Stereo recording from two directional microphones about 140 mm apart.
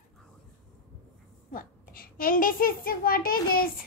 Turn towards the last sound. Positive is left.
turn(degrees=90)